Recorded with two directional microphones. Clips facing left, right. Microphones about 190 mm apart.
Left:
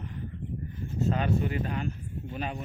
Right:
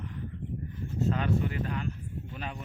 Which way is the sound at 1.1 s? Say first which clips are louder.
Left 3 dB; 15° left (ahead or behind).